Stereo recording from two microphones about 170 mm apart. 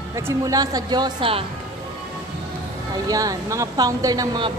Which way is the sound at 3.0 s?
20° right (ahead or behind).